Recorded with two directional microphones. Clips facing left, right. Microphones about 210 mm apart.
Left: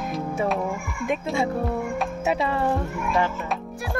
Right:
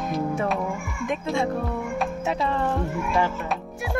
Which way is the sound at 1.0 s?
5° left (ahead or behind).